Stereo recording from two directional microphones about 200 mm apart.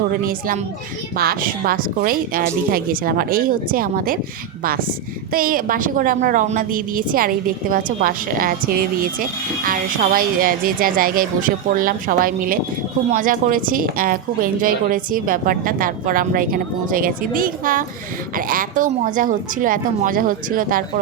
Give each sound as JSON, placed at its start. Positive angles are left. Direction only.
{"t": 0.1, "sound": "a woman's voice", "side_deg": -45}
{"t": 5.3, "sound": "a woman's voice", "side_deg": -45}